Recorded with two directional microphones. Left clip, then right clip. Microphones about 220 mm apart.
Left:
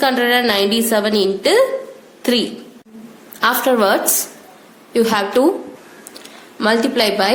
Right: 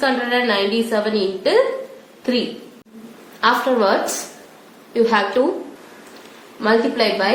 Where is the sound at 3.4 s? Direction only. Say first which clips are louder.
Left 2 dB; 50° left (ahead or behind).